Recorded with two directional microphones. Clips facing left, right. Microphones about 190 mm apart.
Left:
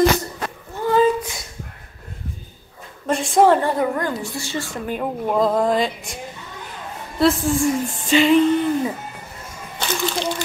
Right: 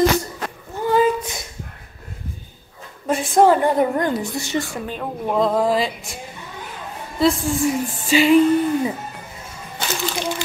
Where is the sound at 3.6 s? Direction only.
20° right (ahead or behind).